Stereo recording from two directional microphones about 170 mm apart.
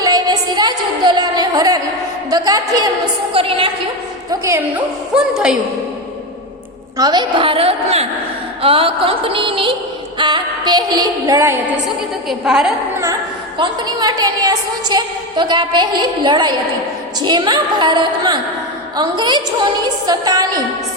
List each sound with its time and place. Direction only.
0.0 s a sound: 25° right (ahead or behind)
2.3 s a woman's voice: 20° right (ahead or behind)
3.3 s a woman's voice: 30° right (ahead or behind)
4.3 s speech: 15° right (ahead or behind)
5.1 s a woman's voice: 5° right (ahead or behind)
6.9 s a sound: 25° right (ahead or behind)
10.2 s a woman's voice: 25° right (ahead or behind)
12.3 s a woman's voice: 5° right (ahead or behind)
13.6 s a woman's voice: 25° right (ahead or behind)